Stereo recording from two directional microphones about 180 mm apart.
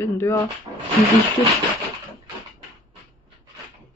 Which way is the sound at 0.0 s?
15° left (ahead or behind).